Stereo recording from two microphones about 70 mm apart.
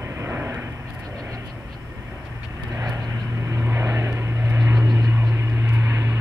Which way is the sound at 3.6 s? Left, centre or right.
Right.